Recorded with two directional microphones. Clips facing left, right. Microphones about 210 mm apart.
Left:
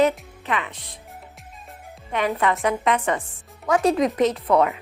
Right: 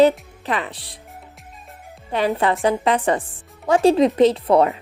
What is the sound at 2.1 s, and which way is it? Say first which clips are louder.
A woman's voice: right 3 dB; 30° right (ahead or behind).